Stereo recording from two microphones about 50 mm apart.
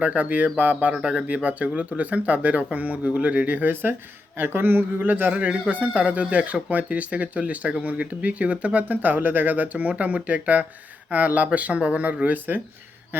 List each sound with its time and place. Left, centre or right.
0.0 s speech: right
5.3 s speech: right